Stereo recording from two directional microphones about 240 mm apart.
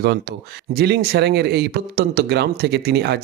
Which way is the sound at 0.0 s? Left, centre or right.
Right.